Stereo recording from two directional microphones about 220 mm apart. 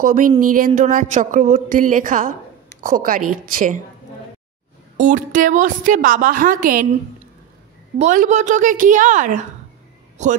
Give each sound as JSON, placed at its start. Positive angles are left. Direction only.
{"t": 0.0, "sound": "a woman's voice", "side_deg": -40}
{"t": 4.9, "sound": "a woman's voice", "side_deg": -35}
{"t": 8.0, "sound": "a woman's voice", "side_deg": -35}